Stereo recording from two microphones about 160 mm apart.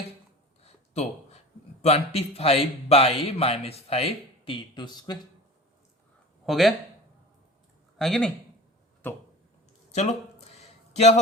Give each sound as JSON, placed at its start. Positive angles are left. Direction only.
{"t": 0.6, "sound": "a sound", "side_deg": 40}
{"t": 1.8, "sound": "a man's voice", "side_deg": 40}
{"t": 6.4, "sound": "speech", "side_deg": 0}
{"t": 7.9, "sound": "speech", "side_deg": 0}
{"t": 9.0, "sound": "speech", "side_deg": 10}
{"t": 9.9, "sound": "speech", "side_deg": 45}
{"t": 10.5, "sound": "a sound", "side_deg": 40}